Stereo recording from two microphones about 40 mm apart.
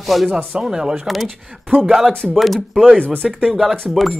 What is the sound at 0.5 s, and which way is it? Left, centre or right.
Speech, centre.